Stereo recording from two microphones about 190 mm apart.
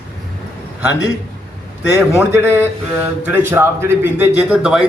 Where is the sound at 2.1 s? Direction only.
10° right (ahead or behind).